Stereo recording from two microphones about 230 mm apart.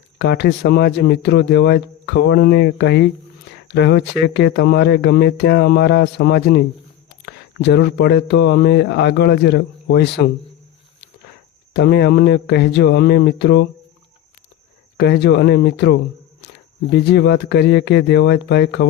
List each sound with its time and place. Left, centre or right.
0.2 s speech: left
11.7 s speech: left
14.9 s speech: left